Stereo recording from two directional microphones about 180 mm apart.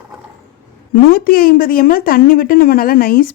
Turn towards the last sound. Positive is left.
turn(degrees=55)  # may be behind; listen again after turning